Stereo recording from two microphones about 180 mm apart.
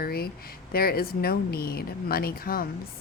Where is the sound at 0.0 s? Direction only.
55° left (ahead or behind).